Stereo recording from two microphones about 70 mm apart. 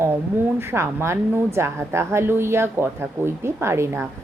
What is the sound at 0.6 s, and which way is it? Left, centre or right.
A woman's voice, right.